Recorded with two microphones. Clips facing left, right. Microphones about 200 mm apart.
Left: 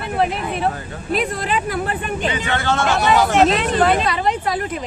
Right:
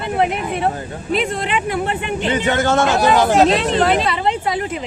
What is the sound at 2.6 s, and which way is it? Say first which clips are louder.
Speech: right 1 dB; 40° right (ahead or behind).